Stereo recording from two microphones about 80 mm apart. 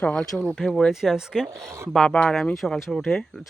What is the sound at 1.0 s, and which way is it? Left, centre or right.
Speech, centre.